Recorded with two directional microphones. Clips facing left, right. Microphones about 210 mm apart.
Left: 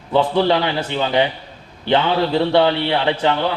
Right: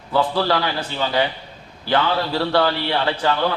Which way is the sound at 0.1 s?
20° left (ahead or behind).